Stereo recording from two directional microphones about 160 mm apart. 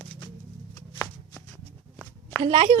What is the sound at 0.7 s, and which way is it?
Shuffling cards, 15° left (ahead or behind).